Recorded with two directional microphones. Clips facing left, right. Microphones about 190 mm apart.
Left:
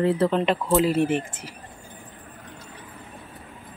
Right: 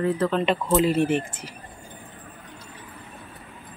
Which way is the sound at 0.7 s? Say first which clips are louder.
Even; centre (ahead or behind).